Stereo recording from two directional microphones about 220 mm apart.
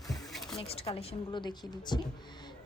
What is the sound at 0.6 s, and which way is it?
Speech, 25° left (ahead or behind).